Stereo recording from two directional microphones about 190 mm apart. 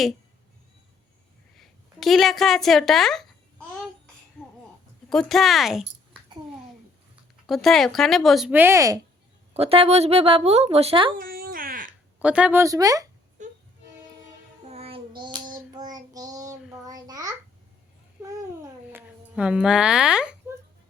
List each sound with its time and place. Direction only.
1.5 s a woman's voice: centre (ahead or behind)
4.4 s a sound: 5° left (ahead or behind)
5.0 s speech: centre (ahead or behind)
7.4 s speech: centre (ahead or behind); by 9.0 s 15° right (ahead or behind)
9.5 s a woman's voice: 30° right (ahead or behind)
11.1 s a sound: 50° right (ahead or behind)
12.2 s speech: 5° right (ahead or behind)
13.4 s music: 40° right (ahead or behind)
14.6 s child singing: 35° right (ahead or behind)
18.9 s speech: 5° right (ahead or behind)